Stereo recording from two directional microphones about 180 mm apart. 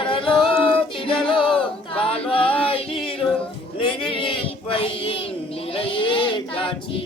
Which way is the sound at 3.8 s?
30° left (ahead or behind).